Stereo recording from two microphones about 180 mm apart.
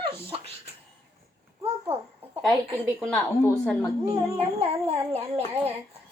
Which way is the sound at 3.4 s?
10° left (ahead or behind).